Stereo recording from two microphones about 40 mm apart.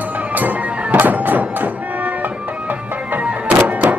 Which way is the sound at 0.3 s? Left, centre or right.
Right.